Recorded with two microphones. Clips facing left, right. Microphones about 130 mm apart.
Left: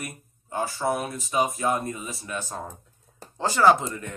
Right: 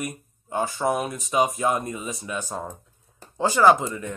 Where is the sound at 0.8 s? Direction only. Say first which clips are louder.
Right 2 dB; 10° right (ahead or behind).